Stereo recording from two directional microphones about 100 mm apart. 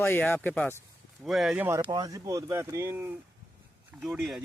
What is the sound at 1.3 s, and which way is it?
Speech, 5° right (ahead or behind).